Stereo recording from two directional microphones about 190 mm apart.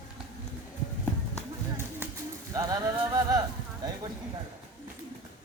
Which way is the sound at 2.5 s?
20° right (ahead or behind).